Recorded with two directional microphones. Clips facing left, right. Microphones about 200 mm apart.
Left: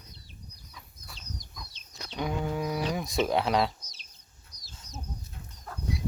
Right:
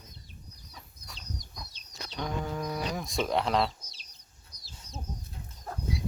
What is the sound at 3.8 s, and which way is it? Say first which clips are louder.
Chicken: even; 30° right (ahead or behind).